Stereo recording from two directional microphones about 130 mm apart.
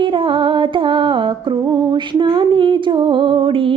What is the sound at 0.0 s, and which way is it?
Music, 40° right (ahead or behind).